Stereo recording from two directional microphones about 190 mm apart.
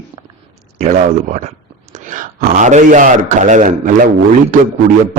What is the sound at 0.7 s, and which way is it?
A man's voice, 40° right (ahead or behind).